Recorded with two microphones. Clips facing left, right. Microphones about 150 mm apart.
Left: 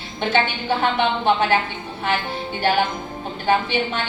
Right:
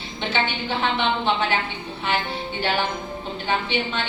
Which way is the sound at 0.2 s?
45° left (ahead or behind).